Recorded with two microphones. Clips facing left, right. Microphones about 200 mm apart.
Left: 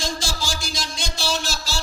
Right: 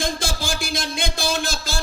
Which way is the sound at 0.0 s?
55° right (ahead or behind).